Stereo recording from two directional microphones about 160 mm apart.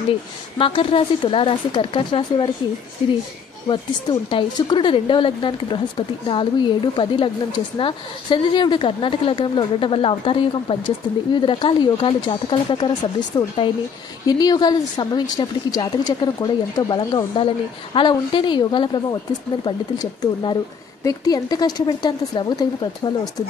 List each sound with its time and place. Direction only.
0.6 s speech: 35° left (ahead or behind)
3.6 s a woman's voice: 30° left (ahead or behind)